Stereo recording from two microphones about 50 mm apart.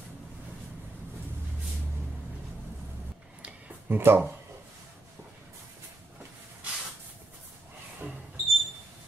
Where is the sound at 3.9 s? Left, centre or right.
Right.